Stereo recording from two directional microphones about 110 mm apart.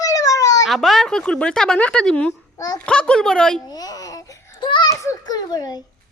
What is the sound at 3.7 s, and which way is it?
Babbling, 35° left (ahead or behind).